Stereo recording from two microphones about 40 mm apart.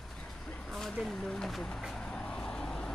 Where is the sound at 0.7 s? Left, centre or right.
Centre.